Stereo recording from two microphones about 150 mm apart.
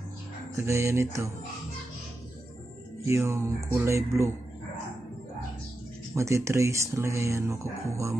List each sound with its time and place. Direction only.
0.6 s speech: 20° right (ahead or behind)
3.1 s speech: 20° right (ahead or behind)
6.1 s speech: 20° right (ahead or behind)